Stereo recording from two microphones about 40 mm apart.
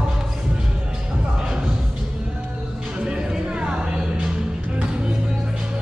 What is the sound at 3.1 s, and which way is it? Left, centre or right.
Music, right.